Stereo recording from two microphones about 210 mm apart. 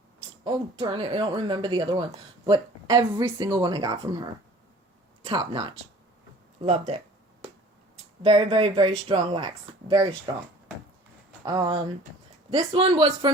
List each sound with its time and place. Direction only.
0.4 s speech: 20° right (ahead or behind)
8.2 s speech: 25° right (ahead or behind)
11.4 s speech: 20° right (ahead or behind)